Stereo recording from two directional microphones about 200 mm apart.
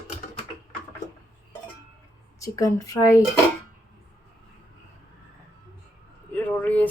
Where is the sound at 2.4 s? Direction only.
15° left (ahead or behind).